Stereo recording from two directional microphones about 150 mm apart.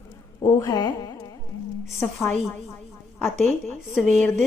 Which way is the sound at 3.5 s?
15° left (ahead or behind).